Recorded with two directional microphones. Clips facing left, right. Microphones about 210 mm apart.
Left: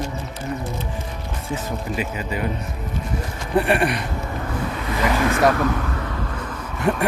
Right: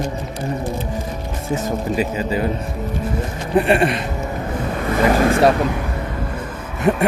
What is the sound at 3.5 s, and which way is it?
Speech, 25° right (ahead or behind).